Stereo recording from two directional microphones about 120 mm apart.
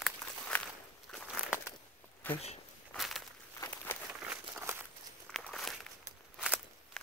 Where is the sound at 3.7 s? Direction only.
15° left (ahead or behind).